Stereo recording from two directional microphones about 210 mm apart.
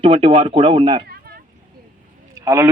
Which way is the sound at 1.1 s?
45° right (ahead or behind).